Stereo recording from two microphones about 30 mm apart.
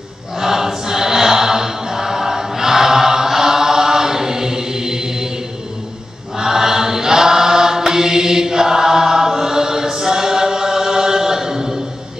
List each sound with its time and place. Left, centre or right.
0.4 s chant: centre
6.3 s choir: centre